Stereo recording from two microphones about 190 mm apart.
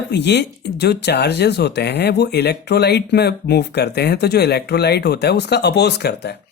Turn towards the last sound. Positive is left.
turn(degrees=60)  # may be behind; listen again after turning